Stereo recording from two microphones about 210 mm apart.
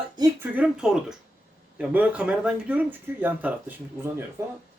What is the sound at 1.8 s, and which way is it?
Speech, 5° right (ahead or behind).